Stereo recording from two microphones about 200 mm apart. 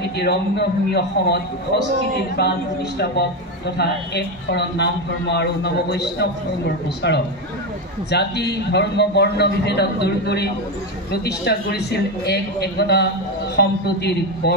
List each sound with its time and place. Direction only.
0.2 s speech: 55° left (ahead or behind)